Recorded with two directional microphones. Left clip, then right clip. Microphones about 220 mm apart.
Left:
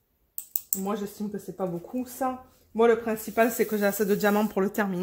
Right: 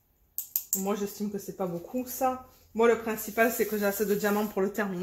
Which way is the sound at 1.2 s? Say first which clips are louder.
Left 1 dB; 30° left (ahead or behind).